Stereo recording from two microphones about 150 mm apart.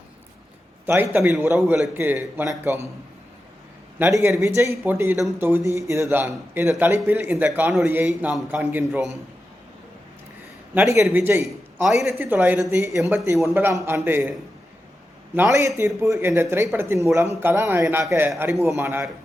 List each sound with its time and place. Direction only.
0.9 s a man's voice: 15° right (ahead or behind)
3.9 s a man's voice: 15° right (ahead or behind)
10.8 s a man's voice: 15° right (ahead or behind)
11.4 s a sound: centre (ahead or behind)
11.9 s a man's voice: 15° right (ahead or behind)
15.4 s a man's voice: 20° right (ahead or behind)